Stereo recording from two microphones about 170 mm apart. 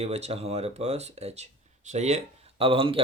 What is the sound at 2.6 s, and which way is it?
Speech, 30° right (ahead or behind).